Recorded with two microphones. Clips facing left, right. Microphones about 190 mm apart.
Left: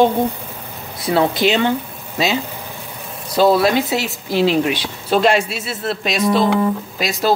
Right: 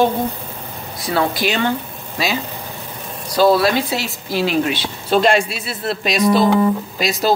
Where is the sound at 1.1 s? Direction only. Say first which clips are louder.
Left 3 dB; 20° left (ahead or behind).